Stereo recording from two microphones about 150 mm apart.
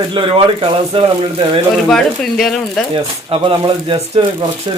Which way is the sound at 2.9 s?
35° right (ahead or behind).